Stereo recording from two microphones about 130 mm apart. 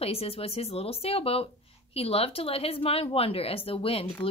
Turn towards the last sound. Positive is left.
turn(degrees=45)  # may be behind; listen again after turning